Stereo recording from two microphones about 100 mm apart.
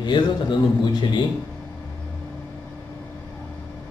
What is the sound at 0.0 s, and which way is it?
Speech, 50° left (ahead or behind).